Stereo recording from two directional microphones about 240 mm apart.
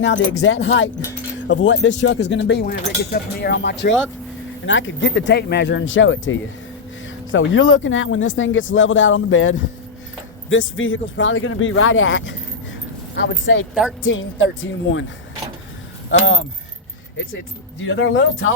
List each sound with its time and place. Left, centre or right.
0.0 s speech: left
16.0 s speech: left
17.8 s speech: left